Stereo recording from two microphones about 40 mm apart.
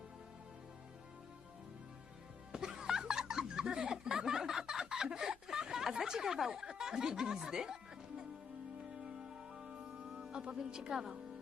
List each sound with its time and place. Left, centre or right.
2.5 s snicker: centre
7.5 s music: centre